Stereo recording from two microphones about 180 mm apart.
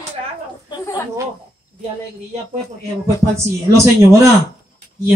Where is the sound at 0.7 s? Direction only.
20° left (ahead or behind).